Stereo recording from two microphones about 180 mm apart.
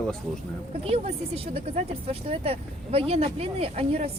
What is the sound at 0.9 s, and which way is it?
Speech, 35° right (ahead or behind).